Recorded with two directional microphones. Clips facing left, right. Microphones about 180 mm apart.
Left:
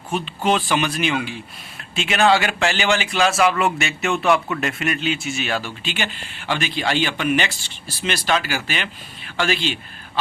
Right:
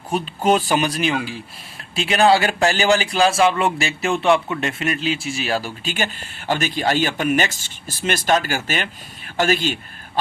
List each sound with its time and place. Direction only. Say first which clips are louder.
0.1 s a man's voice: right 2 dB; 40° right (ahead or behind)